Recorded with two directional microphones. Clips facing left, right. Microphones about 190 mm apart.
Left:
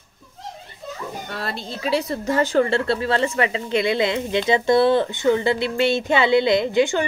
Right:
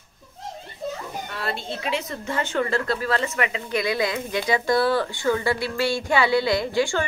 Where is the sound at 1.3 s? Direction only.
40° left (ahead or behind).